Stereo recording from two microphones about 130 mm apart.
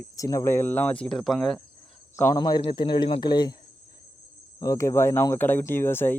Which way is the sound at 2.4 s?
35° left (ahead or behind).